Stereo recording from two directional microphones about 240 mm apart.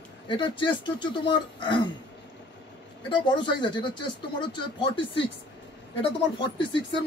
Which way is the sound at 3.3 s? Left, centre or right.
Centre.